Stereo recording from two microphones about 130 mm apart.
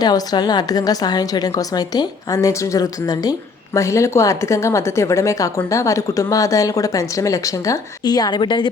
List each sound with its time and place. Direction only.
0.0 s a woman's voice: 30° left (ahead or behind)